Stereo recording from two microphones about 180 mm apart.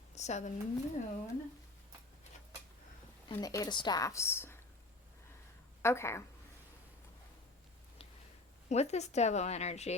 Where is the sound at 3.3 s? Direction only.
20° left (ahead or behind).